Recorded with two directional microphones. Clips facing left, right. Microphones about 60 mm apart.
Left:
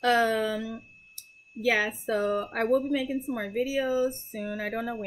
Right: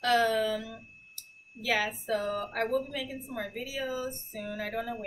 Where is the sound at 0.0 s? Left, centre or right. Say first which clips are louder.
Left 2 dB; left.